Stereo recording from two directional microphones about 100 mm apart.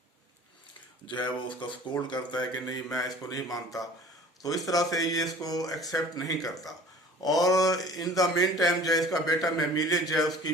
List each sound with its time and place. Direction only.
1.0 s speech: 50° left (ahead or behind); by 3.4 s 35° left (ahead or behind)
4.4 s a man's voice: 35° left (ahead or behind)